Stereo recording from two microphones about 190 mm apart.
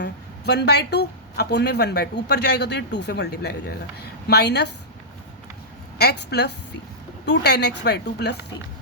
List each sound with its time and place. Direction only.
0.0 s speech: 60° left (ahead or behind)
6.0 s speech: 60° left (ahead or behind)